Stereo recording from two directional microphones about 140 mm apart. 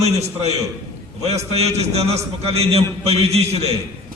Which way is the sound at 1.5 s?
50° right (ahead or behind).